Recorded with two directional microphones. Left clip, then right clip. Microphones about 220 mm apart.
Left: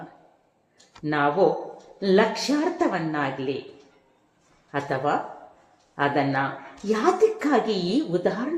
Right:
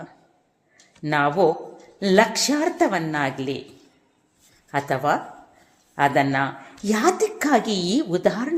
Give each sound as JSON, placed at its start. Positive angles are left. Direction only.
{"t": 1.0, "sound": "speech", "side_deg": -35}
{"t": 4.7, "sound": "speech", "side_deg": -35}